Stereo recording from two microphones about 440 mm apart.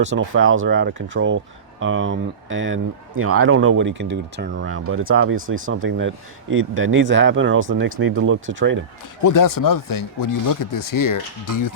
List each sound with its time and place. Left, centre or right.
0.0 s speech: right
9.2 s speech: left